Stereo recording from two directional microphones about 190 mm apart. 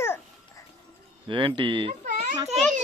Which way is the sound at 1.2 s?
25° right (ahead or behind).